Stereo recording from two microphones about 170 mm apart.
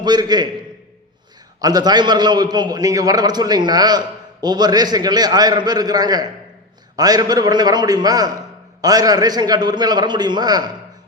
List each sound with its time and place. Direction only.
0.0 s a man's voice: 25° right (ahead or behind)
1.6 s a man's voice: 25° right (ahead or behind)